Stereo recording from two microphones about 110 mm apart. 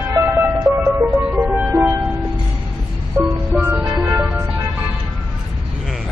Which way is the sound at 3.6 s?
15° right (ahead or behind).